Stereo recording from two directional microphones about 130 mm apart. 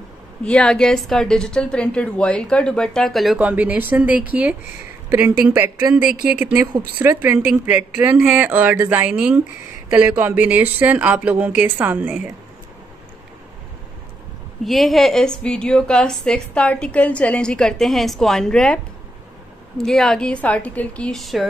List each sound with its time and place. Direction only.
0.4 s a woman's voice: 5° left (ahead or behind)
3.3 s speech: 10° right (ahead or behind)
14.6 s a woman's voice: centre (ahead or behind)
19.8 s a woman's voice: 5° left (ahead or behind)